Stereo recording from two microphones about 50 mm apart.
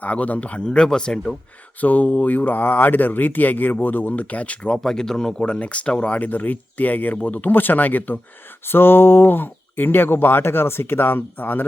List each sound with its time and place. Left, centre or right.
0.0 s speech: left
0.6 s speech: centre
1.8 s speech: left
4.8 s speech: centre; by 8.2 s left
8.6 s speech: left